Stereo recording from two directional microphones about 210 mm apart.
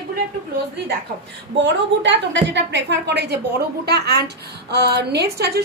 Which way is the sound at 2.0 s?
60° right (ahead or behind).